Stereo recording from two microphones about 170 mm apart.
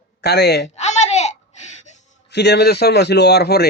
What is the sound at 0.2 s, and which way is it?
Speech, 75° left (ahead or behind).